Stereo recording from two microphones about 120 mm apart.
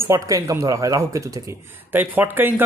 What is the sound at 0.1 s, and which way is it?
Speech, 25° right (ahead or behind).